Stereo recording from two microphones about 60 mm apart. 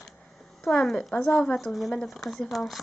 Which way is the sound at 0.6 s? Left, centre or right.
Centre.